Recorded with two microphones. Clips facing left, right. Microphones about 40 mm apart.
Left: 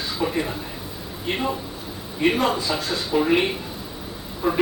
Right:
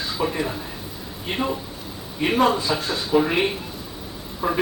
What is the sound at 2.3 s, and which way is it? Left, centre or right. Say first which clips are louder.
Speech: right 3 dB; centre.